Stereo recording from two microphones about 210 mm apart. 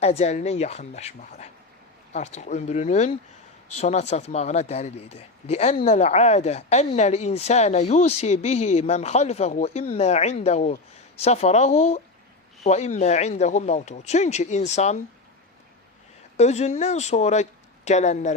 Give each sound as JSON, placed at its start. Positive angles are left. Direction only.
{"t": 0.0, "sound": "speech", "side_deg": 30}
{"t": 16.4, "sound": "speech", "side_deg": 30}